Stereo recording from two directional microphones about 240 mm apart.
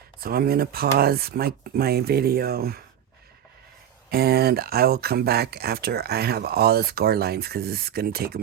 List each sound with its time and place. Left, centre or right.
0.2 s speech: right
4.1 s speech: right